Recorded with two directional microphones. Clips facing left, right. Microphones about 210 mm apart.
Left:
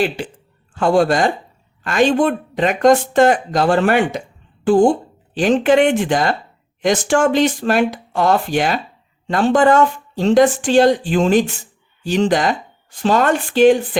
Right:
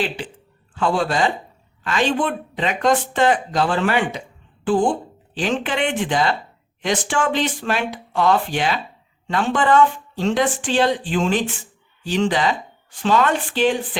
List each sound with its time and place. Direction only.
0.7 s speech: 45° left (ahead or behind)